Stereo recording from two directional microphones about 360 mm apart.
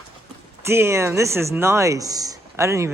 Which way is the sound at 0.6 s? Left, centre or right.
Centre.